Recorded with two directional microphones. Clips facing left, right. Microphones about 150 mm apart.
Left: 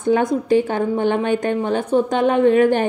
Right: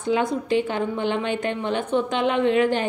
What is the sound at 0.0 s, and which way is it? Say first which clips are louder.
A woman's voice: left 5 dB; 45° left (ahead or behind).